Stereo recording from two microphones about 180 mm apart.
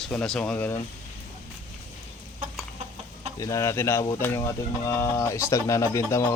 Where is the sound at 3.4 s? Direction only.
15° left (ahead or behind).